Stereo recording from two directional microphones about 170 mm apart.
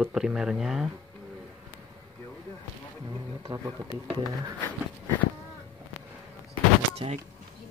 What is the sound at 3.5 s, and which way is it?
Speech, 20° right (ahead or behind).